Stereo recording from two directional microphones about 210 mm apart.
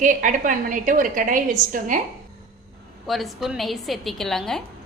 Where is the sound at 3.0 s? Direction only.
Centre (ahead or behind).